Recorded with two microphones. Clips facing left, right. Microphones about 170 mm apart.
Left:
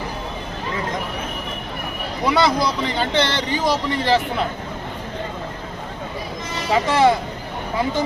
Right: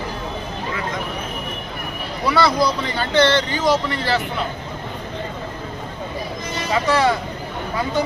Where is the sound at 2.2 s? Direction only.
20° left (ahead or behind).